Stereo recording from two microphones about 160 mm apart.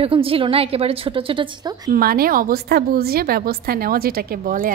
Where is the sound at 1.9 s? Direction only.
70° right (ahead or behind).